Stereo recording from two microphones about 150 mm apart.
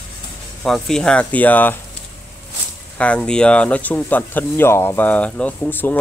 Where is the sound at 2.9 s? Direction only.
10° left (ahead or behind).